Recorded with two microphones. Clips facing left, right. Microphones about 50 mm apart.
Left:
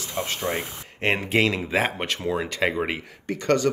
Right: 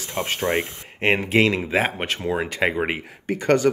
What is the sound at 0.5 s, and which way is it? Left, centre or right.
Speech, centre.